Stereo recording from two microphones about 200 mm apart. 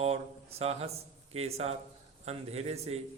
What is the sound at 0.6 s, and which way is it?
A man's voice, 30° right (ahead or behind).